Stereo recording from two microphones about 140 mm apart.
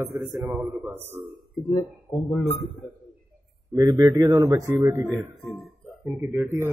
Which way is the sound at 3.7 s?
25° right (ahead or behind).